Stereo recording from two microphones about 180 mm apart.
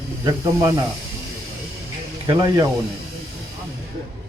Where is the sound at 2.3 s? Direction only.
20° right (ahead or behind).